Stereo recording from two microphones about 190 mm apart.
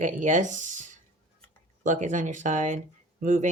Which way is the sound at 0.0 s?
40° right (ahead or behind).